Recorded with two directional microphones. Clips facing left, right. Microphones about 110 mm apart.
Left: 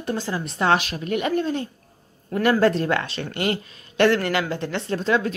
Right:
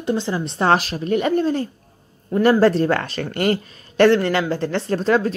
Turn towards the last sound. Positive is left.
turn(degrees=-35)  # may be behind; listen again after turning